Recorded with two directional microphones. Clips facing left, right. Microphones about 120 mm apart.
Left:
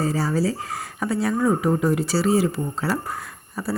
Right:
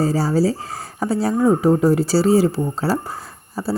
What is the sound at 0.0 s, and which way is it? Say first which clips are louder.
Speech: right 5 dB; 35° right (ahead or behind).